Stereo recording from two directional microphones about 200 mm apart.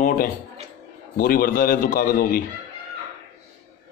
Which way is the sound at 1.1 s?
45° left (ahead or behind).